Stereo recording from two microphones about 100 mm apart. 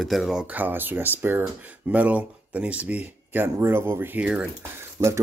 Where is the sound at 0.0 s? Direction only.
Centre (ahead or behind).